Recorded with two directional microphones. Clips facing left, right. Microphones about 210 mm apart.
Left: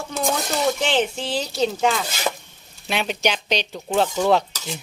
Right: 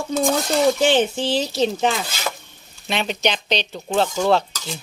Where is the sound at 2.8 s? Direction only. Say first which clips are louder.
Right 1 dB; 5° left (ahead or behind).